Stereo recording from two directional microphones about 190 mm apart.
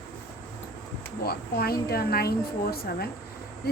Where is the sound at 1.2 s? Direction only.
55° left (ahead or behind).